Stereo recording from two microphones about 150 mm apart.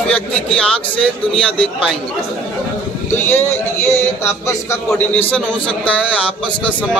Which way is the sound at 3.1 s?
15° left (ahead or behind).